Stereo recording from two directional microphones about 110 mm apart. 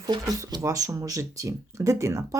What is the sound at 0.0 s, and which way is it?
Speech, 35° right (ahead or behind).